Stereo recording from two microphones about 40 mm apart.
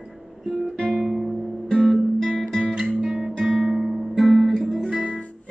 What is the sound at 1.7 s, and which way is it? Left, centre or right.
Guitar, centre.